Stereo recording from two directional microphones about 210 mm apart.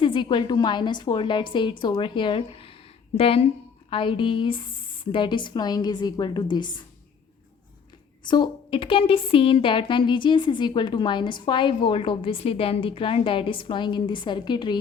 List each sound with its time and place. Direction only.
0.0 s a woman's voice: 20° left (ahead or behind)
8.2 s a woman's voice: 20° left (ahead or behind)